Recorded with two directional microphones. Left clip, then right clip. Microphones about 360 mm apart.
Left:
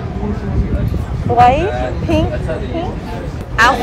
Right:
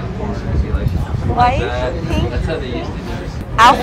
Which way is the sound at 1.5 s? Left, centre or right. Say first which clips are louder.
Left 3 dB; left.